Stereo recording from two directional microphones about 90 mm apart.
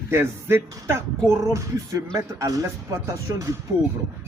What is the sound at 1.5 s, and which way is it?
Speech, 40° right (ahead or behind).